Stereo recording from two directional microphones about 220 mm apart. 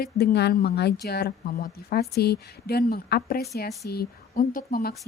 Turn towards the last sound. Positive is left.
turn(degrees=40)  # may be behind; listen again after turning